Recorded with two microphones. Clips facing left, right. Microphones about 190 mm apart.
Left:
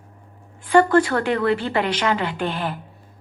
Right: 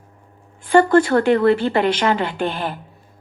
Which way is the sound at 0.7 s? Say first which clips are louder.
Right 2 dB; 25° right (ahead or behind).